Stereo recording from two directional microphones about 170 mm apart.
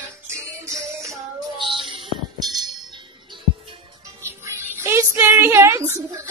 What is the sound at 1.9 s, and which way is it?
Music, 30° right (ahead or behind).